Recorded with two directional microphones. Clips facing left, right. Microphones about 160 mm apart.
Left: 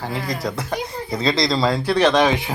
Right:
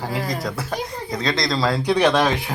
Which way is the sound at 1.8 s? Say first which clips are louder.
Even; 15° right (ahead or behind).